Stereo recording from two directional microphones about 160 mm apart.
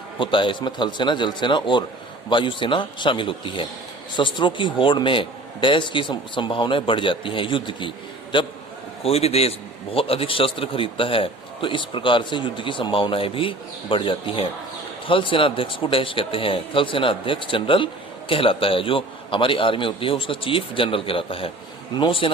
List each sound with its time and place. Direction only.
0.2 s a man's voice: 30° left (ahead or behind)